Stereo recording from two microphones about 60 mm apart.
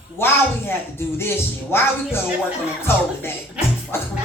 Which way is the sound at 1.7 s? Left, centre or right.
Left.